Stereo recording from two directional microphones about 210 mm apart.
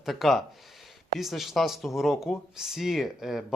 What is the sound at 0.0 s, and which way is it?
Speech, centre (ahead or behind).